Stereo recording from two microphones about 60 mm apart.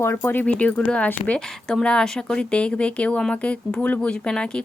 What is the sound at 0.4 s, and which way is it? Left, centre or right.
Speech, left.